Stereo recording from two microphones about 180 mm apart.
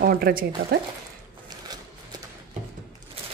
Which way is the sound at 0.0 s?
55° right (ahead or behind).